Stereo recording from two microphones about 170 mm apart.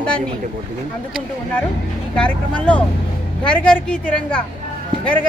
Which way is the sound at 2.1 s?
5° left (ahead or behind).